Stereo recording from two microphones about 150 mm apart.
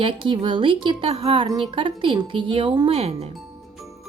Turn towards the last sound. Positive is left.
turn(degrees=-45)  # may be behind; listen again after turning